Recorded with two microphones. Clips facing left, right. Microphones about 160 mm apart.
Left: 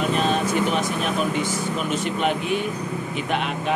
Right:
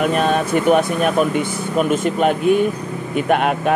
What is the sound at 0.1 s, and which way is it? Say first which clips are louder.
Speech: right 5 dB; 55° right (ahead or behind).